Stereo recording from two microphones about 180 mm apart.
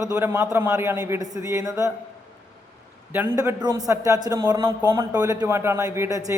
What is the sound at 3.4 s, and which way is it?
A man's voice, 20° right (ahead or behind).